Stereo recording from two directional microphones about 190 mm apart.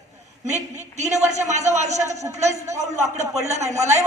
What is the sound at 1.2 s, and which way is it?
Speech, 35° right (ahead or behind).